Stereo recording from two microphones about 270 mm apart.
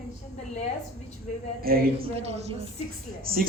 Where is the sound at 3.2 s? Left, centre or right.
Right.